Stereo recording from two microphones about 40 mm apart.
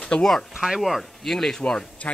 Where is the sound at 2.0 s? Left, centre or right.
Left.